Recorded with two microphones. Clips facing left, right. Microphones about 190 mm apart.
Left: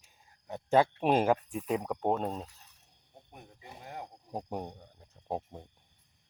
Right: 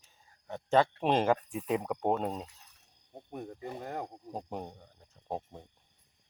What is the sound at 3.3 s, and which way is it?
Speech, 50° right (ahead or behind).